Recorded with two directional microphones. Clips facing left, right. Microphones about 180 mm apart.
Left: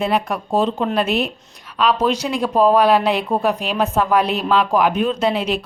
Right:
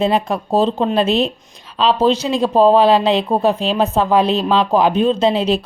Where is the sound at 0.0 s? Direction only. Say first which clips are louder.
Right 3 dB; 25° right (ahead or behind).